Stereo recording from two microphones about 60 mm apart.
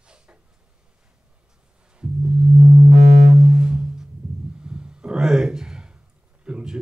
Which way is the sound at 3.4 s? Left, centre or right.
Centre.